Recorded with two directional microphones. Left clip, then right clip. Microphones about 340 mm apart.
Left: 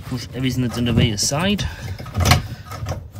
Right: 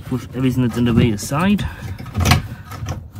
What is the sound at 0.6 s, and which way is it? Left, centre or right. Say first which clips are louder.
Vehicle: right 2 dB; centre.